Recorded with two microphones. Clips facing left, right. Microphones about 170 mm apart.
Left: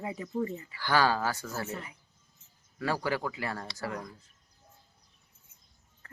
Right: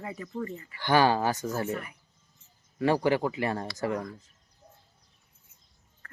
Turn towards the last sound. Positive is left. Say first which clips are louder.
# left 2 dB
turn(degrees=20)  # may be behind; listen again after turning